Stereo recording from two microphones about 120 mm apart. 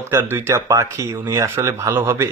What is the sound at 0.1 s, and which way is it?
Speech, 20° right (ahead or behind).